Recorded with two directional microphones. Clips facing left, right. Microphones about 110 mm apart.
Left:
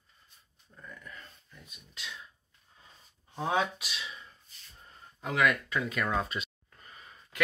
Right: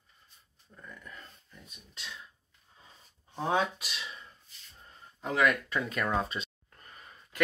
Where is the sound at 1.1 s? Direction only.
Centre (ahead or behind).